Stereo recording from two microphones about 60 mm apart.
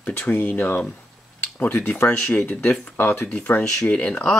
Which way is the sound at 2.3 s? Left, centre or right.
Left.